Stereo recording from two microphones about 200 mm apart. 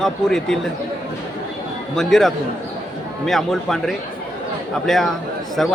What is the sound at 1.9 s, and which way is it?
A man's voice, centre (ahead or behind).